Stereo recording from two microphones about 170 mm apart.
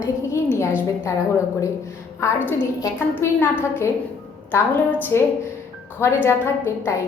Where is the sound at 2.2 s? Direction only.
15° left (ahead or behind).